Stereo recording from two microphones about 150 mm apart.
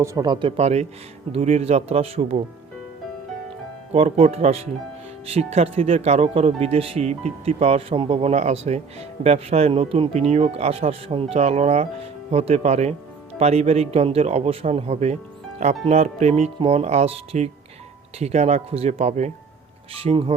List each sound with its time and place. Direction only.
0.0 s speech: 25° right (ahead or behind)
0.5 s speech: 45° right (ahead or behind)
3.9 s speech: 45° right (ahead or behind)
20.0 s speech: 40° right (ahead or behind)